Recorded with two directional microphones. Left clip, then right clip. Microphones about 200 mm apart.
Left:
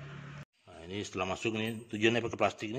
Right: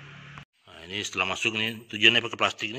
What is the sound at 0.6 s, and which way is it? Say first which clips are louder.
Speech: right 8 dB; 5° left (ahead or behind).